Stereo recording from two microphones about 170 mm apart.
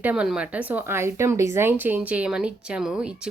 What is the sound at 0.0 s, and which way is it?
Speech, 5° right (ahead or behind).